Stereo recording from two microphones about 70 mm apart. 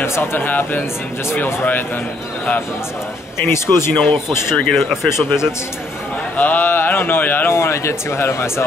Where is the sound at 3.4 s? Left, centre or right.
Left.